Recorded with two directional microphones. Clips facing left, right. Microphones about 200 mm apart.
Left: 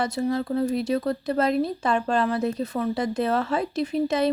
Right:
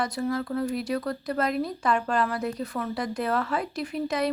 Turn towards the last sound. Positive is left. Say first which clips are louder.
# left 5 dB
turn(degrees=25)  # may be behind; listen again after turning